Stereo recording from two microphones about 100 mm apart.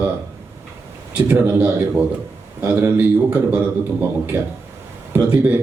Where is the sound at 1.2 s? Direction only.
20° right (ahead or behind).